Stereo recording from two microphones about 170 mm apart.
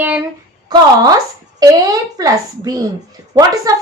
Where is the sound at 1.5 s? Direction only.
20° right (ahead or behind).